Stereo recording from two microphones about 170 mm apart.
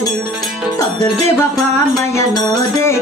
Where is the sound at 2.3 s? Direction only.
15° left (ahead or behind).